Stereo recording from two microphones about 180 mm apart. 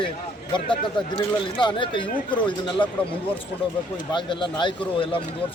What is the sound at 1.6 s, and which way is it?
Speech, 25° left (ahead or behind).